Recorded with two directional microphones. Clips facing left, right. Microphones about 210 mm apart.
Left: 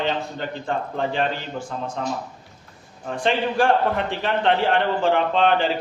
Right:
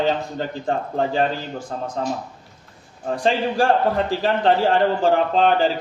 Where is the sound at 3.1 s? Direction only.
35° right (ahead or behind).